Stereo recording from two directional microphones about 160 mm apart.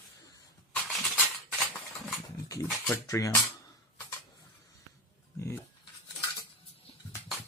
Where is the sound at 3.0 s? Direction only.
20° left (ahead or behind).